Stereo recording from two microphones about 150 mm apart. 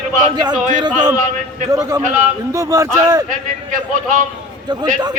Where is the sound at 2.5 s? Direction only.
20° right (ahead or behind).